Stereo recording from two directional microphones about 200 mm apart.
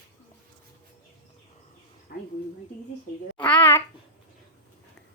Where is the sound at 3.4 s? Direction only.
5° left (ahead or behind).